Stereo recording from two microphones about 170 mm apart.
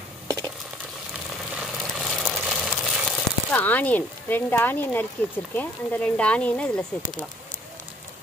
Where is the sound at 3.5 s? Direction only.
10° left (ahead or behind).